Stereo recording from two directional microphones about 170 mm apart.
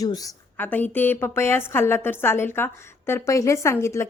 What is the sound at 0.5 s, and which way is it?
A woman's voice, 10° left (ahead or behind).